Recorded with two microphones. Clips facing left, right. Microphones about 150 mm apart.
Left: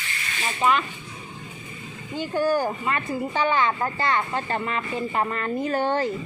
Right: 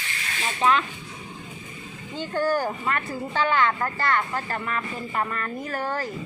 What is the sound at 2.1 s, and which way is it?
Speech, 10° left (ahead or behind).